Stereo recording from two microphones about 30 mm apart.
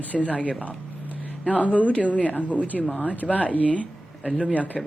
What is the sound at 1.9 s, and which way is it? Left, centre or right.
Speech, left.